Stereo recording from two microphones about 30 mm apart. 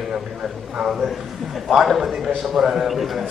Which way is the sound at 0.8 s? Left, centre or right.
Centre.